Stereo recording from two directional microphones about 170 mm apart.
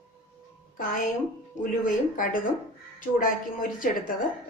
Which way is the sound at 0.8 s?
50° left (ahead or behind).